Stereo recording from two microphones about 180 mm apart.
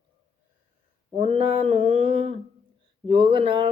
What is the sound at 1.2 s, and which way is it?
Speech, 35° right (ahead or behind).